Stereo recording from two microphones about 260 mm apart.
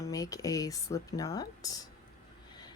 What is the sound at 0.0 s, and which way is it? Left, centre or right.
Speech, centre.